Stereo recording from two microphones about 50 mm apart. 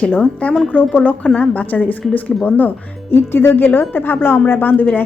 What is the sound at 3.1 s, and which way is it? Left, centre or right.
A woman's voice, left.